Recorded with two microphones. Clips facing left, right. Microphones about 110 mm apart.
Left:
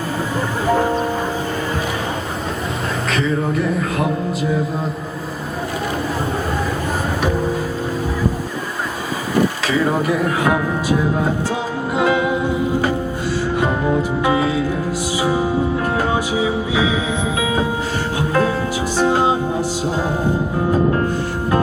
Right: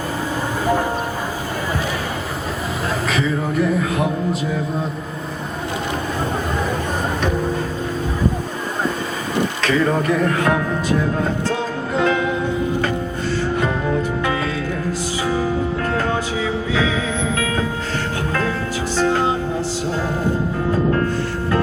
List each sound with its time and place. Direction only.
3.1 s speech: centre (ahead or behind)
9.6 s speech: 10° left (ahead or behind)
11.9 s music: 10° left (ahead or behind)